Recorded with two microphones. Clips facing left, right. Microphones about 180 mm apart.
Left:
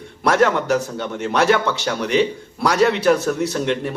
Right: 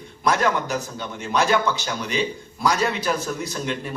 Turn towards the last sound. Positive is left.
turn(degrees=65)  # may be behind; listen again after turning